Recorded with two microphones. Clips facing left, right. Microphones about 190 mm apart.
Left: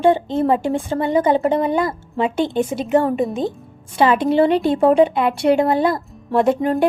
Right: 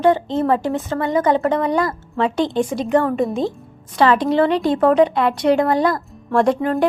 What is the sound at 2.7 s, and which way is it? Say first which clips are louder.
Speech: right 1 dB; 25° left (ahead or behind).